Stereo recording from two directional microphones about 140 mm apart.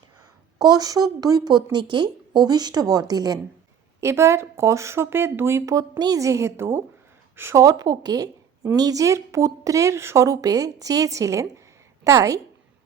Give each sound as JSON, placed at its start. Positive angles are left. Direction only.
{"t": 0.6, "sound": "a woman's voice", "side_deg": -25}